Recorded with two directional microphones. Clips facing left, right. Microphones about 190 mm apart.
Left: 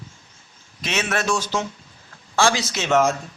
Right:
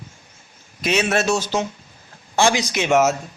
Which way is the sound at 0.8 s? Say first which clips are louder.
Right 6 dB; 15° right (ahead or behind).